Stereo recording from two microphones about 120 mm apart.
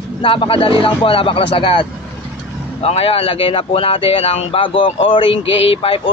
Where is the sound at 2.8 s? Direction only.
55° left (ahead or behind).